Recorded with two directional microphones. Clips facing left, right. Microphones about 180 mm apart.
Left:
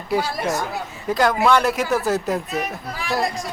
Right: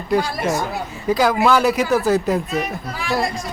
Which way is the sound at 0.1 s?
5° left (ahead or behind).